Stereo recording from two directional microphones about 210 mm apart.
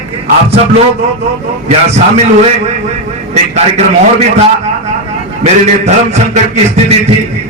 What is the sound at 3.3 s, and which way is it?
A man's voice, 30° right (ahead or behind).